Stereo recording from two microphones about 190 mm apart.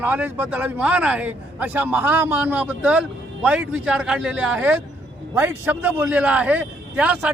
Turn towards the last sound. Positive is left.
turn(degrees=-5)  # may be behind; listen again after turning